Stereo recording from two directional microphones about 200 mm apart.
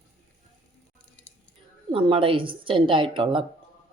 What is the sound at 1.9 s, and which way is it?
Speech, 25° right (ahead or behind).